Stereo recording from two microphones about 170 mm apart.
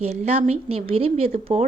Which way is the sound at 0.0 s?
40° right (ahead or behind).